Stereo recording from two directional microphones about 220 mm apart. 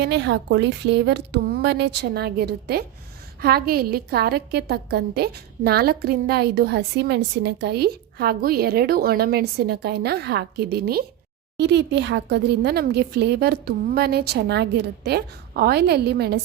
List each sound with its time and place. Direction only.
0.0 s a woman's voice: 50° right (ahead or behind)